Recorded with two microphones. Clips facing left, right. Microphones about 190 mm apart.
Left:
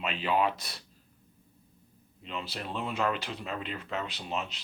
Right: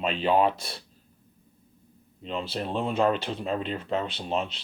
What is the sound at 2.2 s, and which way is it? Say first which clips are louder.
Speech: right 7 dB; 30° right (ahead or behind).